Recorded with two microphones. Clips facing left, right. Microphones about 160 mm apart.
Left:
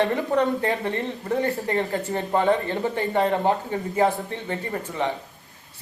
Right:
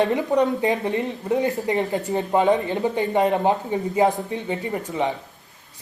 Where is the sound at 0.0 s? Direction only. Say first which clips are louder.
Right 2 dB; 15° right (ahead or behind).